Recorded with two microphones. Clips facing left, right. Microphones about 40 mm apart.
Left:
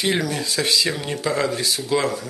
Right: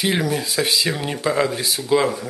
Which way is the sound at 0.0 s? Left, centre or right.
Centre.